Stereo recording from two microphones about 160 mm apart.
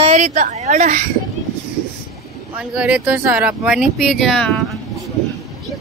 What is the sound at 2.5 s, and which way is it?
Speech, 10° right (ahead or behind).